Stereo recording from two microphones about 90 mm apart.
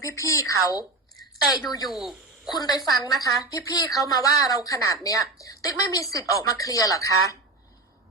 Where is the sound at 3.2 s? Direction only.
40° left (ahead or behind).